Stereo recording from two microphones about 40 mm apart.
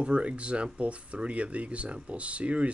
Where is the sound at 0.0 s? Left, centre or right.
Right.